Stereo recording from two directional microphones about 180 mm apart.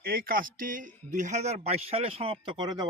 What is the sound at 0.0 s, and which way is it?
Speech, 55° right (ahead or behind).